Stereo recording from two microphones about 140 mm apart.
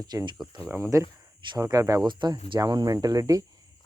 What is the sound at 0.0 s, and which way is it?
Speech, 30° right (ahead or behind).